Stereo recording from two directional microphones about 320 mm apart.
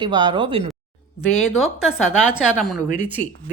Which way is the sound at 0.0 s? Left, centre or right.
Centre.